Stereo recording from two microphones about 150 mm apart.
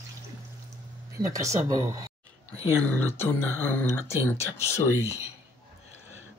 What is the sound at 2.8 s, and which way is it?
Speech, 15° left (ahead or behind).